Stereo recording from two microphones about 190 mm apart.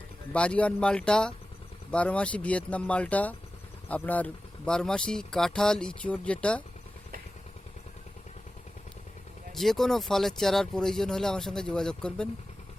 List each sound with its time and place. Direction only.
0.3 s speech: 5° left (ahead or behind)
9.6 s speech: centre (ahead or behind)